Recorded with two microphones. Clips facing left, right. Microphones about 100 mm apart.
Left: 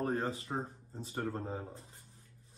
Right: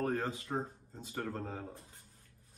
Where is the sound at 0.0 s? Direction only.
25° left (ahead or behind).